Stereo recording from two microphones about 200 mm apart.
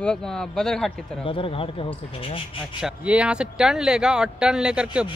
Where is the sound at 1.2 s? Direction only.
25° left (ahead or behind).